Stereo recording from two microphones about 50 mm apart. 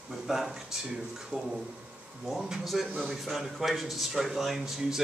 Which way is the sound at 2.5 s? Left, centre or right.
Centre.